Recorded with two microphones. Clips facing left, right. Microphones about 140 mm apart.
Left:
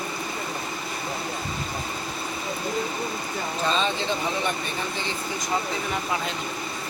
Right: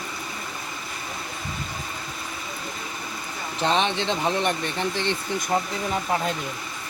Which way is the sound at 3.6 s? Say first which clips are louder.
Right 3 dB; 75° right (ahead or behind).